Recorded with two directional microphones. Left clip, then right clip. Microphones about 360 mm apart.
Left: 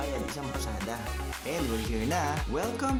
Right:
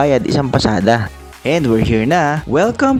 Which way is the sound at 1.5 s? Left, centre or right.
Left.